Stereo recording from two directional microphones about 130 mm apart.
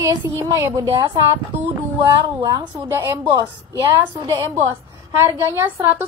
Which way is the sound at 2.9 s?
20° right (ahead or behind).